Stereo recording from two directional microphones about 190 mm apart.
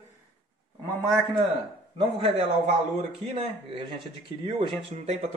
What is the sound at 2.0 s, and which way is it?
Speech, 30° right (ahead or behind).